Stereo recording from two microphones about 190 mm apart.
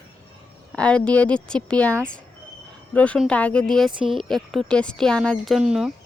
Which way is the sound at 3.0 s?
5° left (ahead or behind).